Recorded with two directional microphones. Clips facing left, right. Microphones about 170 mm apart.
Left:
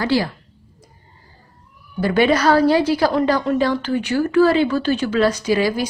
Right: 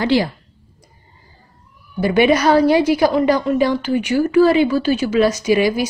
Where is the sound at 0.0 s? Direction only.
20° right (ahead or behind).